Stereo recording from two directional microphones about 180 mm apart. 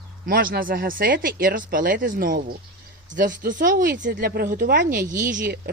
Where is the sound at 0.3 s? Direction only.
50° right (ahead or behind).